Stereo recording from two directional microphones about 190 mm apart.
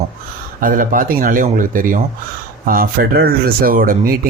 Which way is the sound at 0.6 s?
45° right (ahead or behind).